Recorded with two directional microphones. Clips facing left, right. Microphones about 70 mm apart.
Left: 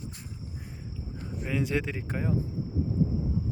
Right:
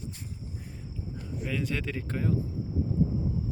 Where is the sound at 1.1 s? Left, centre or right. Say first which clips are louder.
Right 1 dB; left.